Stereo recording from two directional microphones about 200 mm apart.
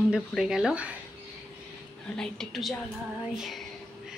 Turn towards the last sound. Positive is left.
turn(degrees=0)  # may be behind; listen again after turning